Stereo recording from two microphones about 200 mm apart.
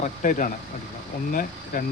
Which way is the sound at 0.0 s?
40° left (ahead or behind).